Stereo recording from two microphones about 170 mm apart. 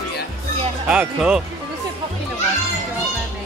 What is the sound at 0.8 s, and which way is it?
Speech, 5° right (ahead or behind).